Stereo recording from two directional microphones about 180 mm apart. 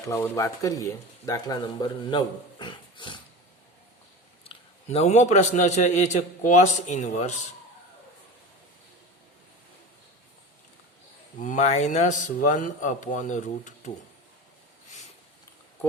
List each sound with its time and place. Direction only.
0.1 s speech: 15° left (ahead or behind)
4.4 s a man's voice: 35° left (ahead or behind)
11.3 s speech: 45° left (ahead or behind)